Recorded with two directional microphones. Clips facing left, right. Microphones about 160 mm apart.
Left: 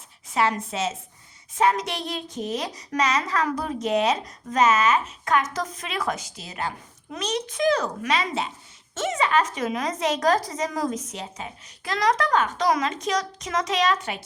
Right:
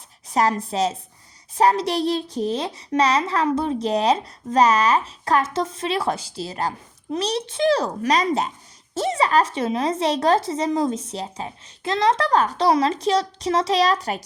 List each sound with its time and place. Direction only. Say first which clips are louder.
0.3 s a woman's voice: right 3 dB; 40° right (ahead or behind)